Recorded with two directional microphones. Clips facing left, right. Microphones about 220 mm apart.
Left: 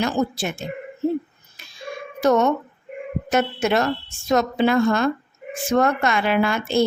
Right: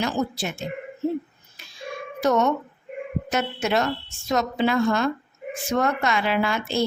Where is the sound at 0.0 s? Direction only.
50° left (ahead or behind).